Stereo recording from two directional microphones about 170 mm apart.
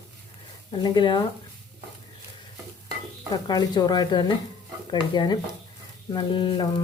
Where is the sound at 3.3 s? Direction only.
25° left (ahead or behind).